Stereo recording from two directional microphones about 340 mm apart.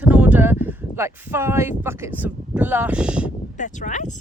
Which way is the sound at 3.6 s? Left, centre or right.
Left.